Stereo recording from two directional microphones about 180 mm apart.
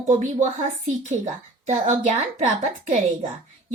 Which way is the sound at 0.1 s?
45° right (ahead or behind).